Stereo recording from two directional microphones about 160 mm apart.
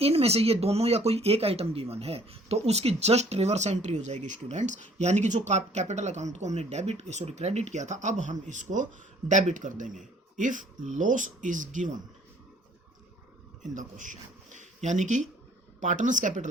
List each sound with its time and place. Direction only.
0.0 s speech: 40° right (ahead or behind)
13.6 s speech: 50° right (ahead or behind)